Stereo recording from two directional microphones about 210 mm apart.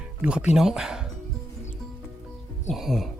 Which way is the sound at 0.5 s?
Centre (ahead or behind).